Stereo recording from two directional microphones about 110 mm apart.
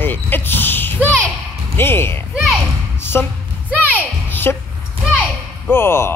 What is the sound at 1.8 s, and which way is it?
Basketball bounce, 20° left (ahead or behind).